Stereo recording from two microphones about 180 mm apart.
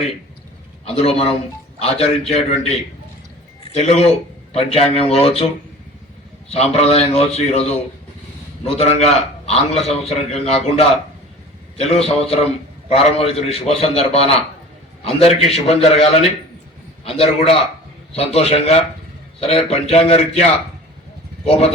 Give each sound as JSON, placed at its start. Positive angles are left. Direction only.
{"t": 0.9, "sound": "a man's voice", "side_deg": 35}
{"t": 6.5, "sound": "a man's voice", "side_deg": 35}
{"t": 8.6, "sound": "a man's voice", "side_deg": 35}
{"t": 12.0, "sound": "a man's voice", "side_deg": 35}
{"t": 21.4, "sound": "a man's voice", "side_deg": 35}